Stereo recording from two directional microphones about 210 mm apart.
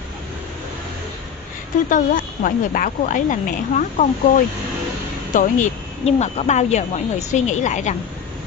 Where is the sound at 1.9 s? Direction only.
40° left (ahead or behind).